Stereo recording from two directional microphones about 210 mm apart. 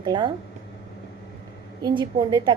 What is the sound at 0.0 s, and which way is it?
Speech, 20° right (ahead or behind).